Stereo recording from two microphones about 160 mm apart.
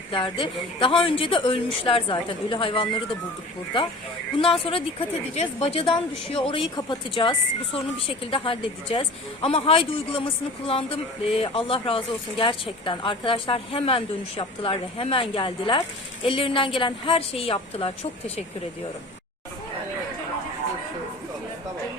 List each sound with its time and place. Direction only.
0.1 s a woman's voice: 30° left (ahead or behind)
4.4 s a woman's voice: 35° left (ahead or behind)